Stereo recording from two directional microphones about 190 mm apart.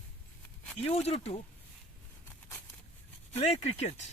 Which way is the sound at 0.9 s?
30° left (ahead or behind).